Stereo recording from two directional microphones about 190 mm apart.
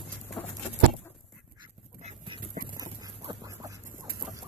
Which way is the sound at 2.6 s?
20° right (ahead or behind).